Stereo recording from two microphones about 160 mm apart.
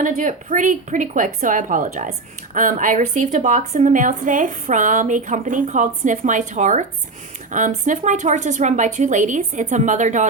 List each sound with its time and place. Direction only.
0.0 s a woman's voice: 55° right (ahead or behind)